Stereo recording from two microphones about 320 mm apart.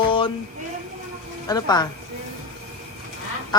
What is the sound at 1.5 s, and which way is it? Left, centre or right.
Speech, centre.